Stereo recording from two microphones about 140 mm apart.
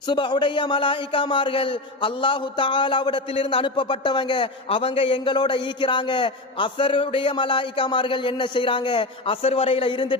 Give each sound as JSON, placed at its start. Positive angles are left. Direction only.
{"t": 0.1, "sound": "a man's voice", "side_deg": 35}